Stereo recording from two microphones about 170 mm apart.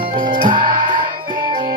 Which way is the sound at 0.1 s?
50° right (ahead or behind).